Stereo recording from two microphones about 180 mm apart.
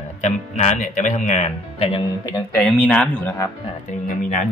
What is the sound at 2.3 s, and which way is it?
Speech, 5° left (ahead or behind).